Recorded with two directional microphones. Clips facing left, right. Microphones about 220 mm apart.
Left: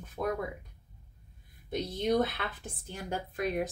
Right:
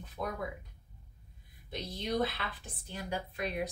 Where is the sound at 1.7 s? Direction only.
50° left (ahead or behind).